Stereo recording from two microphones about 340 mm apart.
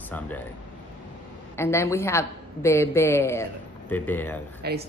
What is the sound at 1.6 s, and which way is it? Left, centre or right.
Speech, centre.